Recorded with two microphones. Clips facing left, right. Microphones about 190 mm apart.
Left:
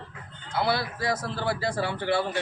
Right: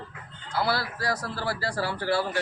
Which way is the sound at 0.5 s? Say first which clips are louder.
Left 1 dB; 20° left (ahead or behind).